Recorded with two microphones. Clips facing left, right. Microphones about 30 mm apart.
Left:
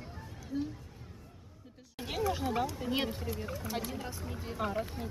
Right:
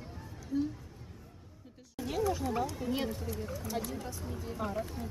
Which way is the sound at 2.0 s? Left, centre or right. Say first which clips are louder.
Right 3 dB; left.